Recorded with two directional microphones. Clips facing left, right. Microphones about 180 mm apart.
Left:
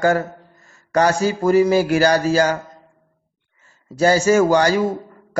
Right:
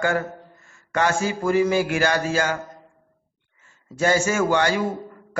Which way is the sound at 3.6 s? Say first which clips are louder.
Left 6 dB; 35° left (ahead or behind).